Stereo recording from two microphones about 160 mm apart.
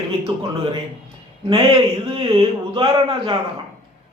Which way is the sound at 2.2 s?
35° right (ahead or behind).